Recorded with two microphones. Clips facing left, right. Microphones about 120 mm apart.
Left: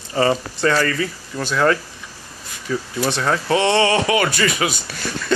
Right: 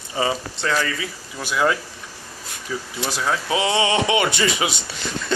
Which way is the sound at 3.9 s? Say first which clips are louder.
Left 2 dB; 20° right (ahead or behind).